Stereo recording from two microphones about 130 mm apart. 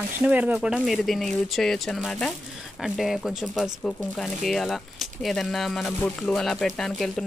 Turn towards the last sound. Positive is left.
turn(degrees=0)  # may be behind; listen again after turning